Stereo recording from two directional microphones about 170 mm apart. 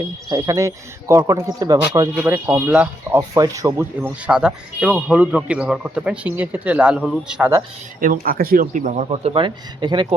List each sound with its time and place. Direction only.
0.3 s speech: 20° right (ahead or behind); by 7.5 s 5° right (ahead or behind)
8.0 s a man's voice: 55° right (ahead or behind); by 10.2 s 25° right (ahead or behind)